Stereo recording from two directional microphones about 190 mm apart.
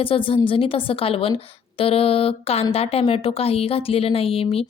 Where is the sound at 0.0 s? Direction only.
30° left (ahead or behind).